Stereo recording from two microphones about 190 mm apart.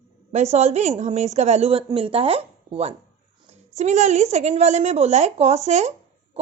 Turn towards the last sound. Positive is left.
turn(degrees=-35)  # may be behind; listen again after turning